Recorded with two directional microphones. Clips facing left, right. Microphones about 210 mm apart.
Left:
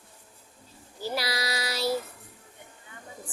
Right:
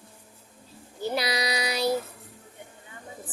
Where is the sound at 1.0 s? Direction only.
20° right (ahead or behind).